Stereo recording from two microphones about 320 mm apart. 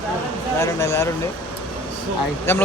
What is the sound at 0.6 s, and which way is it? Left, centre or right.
Speech, centre.